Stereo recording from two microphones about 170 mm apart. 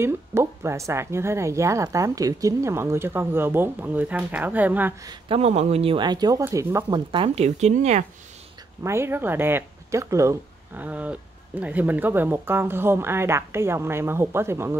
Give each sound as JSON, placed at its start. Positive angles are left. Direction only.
{"t": 0.0, "sound": "speech", "side_deg": -15}
{"t": 5.3, "sound": "speech", "side_deg": -35}
{"t": 7.1, "sound": "speech", "side_deg": -35}
{"t": 8.8, "sound": "speech", "side_deg": -15}